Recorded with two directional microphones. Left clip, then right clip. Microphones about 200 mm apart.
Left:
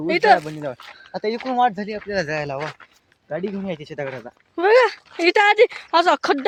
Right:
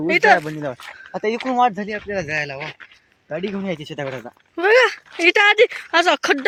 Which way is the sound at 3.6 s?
50° right (ahead or behind).